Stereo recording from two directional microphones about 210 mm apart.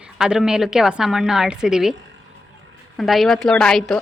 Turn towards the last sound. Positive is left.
turn(degrees=0)  # may be behind; listen again after turning